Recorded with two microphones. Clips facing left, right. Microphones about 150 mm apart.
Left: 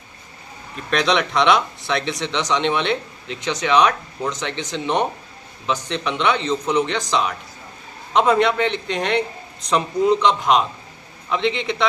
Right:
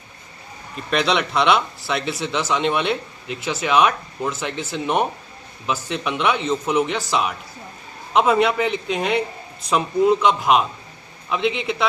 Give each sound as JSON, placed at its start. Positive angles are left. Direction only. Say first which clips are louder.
{"t": 0.9, "sound": "a man's voice", "louder": "left 1 dB", "side_deg": -5}